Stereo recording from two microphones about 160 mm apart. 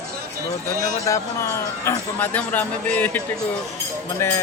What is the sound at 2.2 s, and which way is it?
Speech, 10° left (ahead or behind).